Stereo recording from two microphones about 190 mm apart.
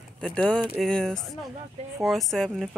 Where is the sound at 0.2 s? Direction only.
5° left (ahead or behind).